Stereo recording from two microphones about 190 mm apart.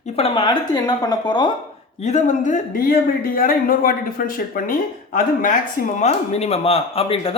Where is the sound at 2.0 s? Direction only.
40° left (ahead or behind).